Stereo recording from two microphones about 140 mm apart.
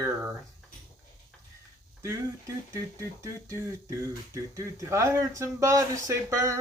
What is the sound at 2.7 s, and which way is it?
Speech, 20° right (ahead or behind).